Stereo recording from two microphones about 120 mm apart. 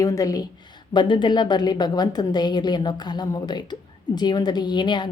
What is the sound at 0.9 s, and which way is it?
A woman's voice, 40° left (ahead or behind).